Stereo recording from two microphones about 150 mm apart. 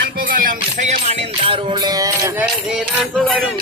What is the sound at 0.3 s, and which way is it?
Music, 60° right (ahead or behind).